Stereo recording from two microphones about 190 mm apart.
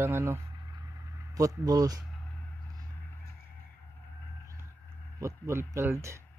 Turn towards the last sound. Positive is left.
turn(degrees=-15)  # may be behind; listen again after turning